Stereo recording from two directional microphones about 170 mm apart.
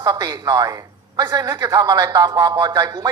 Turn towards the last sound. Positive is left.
turn(degrees=-20)  # may be behind; listen again after turning